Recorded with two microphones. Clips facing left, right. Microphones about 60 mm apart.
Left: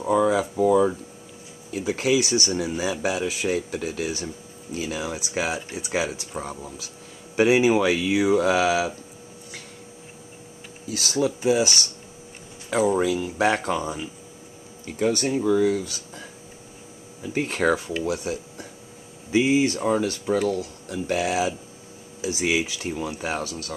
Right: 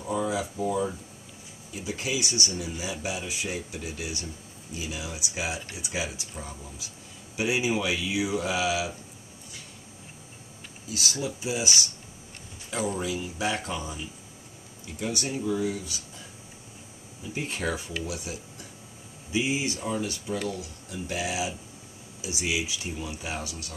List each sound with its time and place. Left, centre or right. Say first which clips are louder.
0.0 s speech: left 8 dB; left
4.7 s speech: left 7 dB; left
10.9 s speech: left 8 dB; left
12.9 s speech: left 9 dB; left
15.5 s speech: left 8 dB; left
17.3 s speech: left 9 dB; left